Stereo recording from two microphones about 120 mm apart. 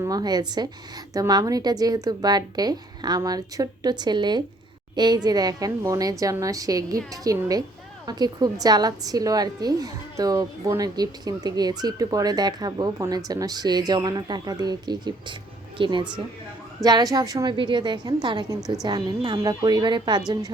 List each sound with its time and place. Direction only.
0.0 s a woman's voice: 35° right (ahead or behind)